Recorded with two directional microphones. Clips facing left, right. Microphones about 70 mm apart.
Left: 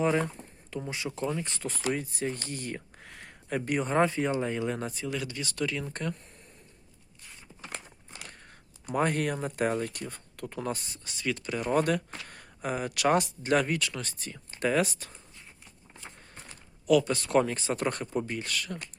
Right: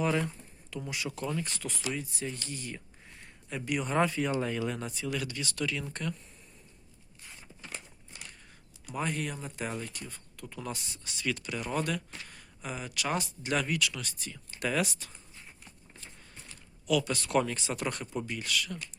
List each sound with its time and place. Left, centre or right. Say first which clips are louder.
0.8 s speech: left 3 dB; left
3.0 s a sound: left 5 dB; left
3.7 s speech: left 2 dB; left
8.2 s speech: left 2 dB; left
11.3 s speech: left 3 dB; left
11.6 s speech: left 8 dB; left
13.4 s speech: left 4 dB; left
16.0 s a sound: left 6 dB; left
16.5 s speech: left 6 dB; left
18.0 s speech: left 5 dB; left
18.3 s speech: even; left